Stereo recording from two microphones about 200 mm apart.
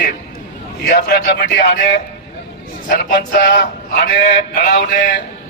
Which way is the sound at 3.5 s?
60° left (ahead or behind).